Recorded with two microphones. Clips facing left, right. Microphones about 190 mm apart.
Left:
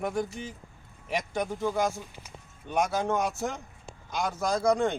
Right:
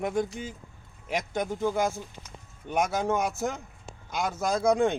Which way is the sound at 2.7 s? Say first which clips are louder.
Right 1 dB; 5° right (ahead or behind).